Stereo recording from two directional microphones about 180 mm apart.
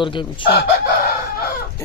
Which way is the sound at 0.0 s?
25° left (ahead or behind).